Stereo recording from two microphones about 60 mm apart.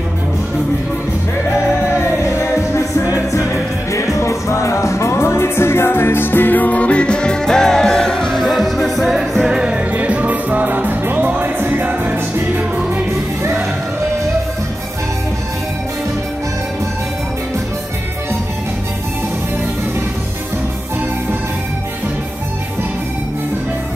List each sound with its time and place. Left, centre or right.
2.0 s music: left
3.1 s music: left; by 13.0 s right
13.4 s music: right